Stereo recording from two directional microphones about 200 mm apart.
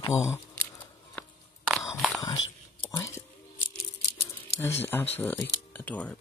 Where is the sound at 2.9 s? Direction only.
15° left (ahead or behind).